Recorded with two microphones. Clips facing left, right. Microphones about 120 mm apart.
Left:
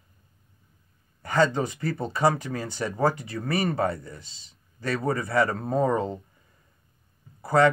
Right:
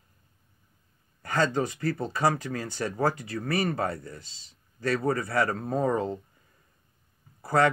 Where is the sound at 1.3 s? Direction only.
25° left (ahead or behind).